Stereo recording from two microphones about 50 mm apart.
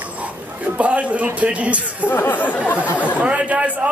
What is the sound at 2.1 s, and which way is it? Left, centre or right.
Speech, left.